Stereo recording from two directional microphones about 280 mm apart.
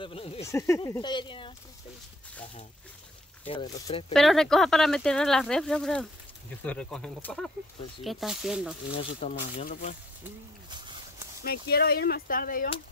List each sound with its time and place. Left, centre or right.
0.0 s speech: centre
3.4 s speech: centre
4.1 s speech: centre
8.9 s speech: left
11.4 s speech: left